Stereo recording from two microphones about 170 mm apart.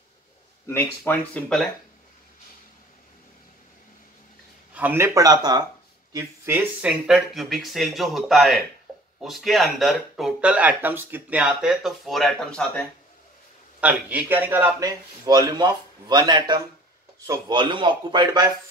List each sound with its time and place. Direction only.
0.7 s speech: 10° left (ahead or behind)
4.7 s a man's voice: 15° right (ahead or behind)
6.1 s speech: 15° right (ahead or behind); by 12.8 s 5° left (ahead or behind)
13.7 s a man's voice: 10° right (ahead or behind); by 18.5 s 25° right (ahead or behind)